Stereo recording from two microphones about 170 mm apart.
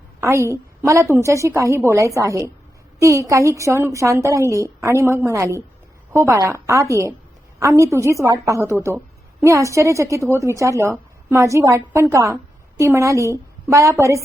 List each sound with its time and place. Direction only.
0.2 s a woman's voice: 15° right (ahead or behind)